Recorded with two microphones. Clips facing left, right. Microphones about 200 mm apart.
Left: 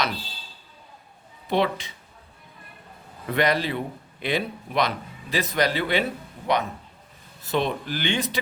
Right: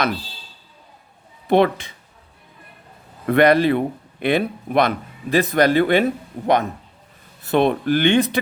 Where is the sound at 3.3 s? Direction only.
55° right (ahead or behind).